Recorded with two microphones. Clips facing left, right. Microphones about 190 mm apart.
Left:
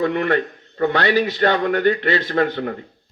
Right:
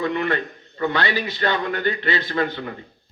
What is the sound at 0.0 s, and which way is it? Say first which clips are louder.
A man's voice: left 4 dB; 55° left (ahead or behind).